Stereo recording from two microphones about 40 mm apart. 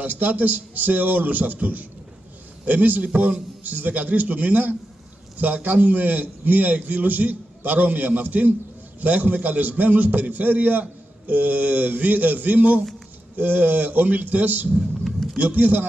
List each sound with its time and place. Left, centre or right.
0.0 s a man's voice: right
3.6 s a man's voice: right